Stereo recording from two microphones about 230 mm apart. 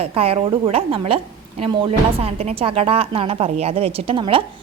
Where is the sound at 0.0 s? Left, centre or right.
Right.